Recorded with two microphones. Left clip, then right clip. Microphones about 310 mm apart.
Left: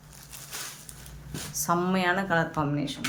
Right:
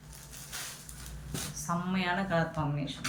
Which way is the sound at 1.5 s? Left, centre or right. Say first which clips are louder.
Left 9 dB; centre.